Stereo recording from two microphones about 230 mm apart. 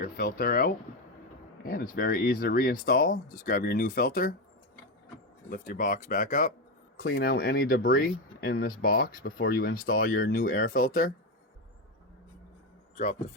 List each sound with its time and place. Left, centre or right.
0.0 s speech: left
5.5 s speech: left